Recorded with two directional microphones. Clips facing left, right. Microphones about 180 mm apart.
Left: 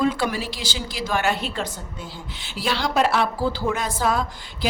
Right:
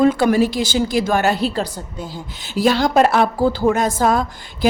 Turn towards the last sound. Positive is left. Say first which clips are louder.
# right 6 dB
turn(degrees=-45)  # may be behind; listen again after turning